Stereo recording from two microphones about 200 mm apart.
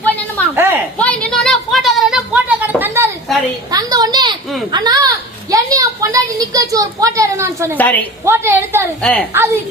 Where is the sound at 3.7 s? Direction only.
20° right (ahead or behind).